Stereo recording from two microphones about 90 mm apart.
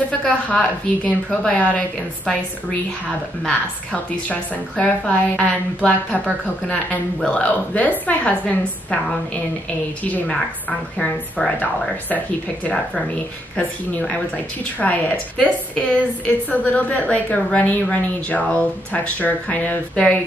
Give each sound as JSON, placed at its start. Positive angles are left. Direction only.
{"t": 0.2, "sound": "a woman's voice", "side_deg": 15}
{"t": 3.4, "sound": "a woman's voice", "side_deg": 15}